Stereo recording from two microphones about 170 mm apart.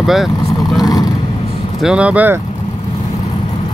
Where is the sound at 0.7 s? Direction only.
20° left (ahead or behind).